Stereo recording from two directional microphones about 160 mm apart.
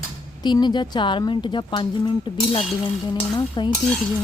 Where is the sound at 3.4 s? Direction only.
30° left (ahead or behind).